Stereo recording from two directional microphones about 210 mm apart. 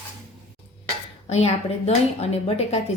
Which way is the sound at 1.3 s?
30° left (ahead or behind).